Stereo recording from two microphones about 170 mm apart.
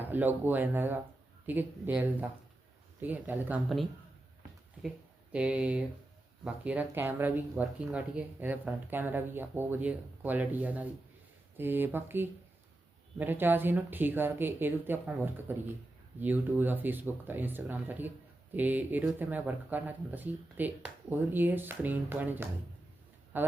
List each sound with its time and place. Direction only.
0.0 s speech: 10° right (ahead or behind)
5.3 s speech: 5° right (ahead or behind)